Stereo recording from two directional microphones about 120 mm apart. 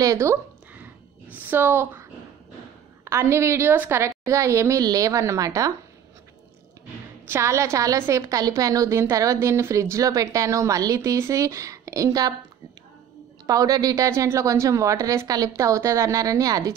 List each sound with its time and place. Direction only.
0.0 s a sound: 25° right (ahead or behind)
1.3 s a woman's voice: 15° right (ahead or behind)
3.1 s a woman's voice: 25° right (ahead or behind)
7.2 s a woman's voice: 25° right (ahead or behind)
13.5 s a woman's voice: 30° right (ahead or behind)